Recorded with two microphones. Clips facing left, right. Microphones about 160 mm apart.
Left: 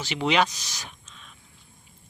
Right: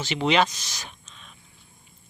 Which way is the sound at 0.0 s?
10° left (ahead or behind).